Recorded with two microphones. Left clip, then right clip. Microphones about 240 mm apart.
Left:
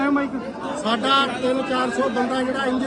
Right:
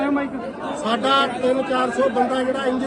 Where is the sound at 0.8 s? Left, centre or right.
Centre.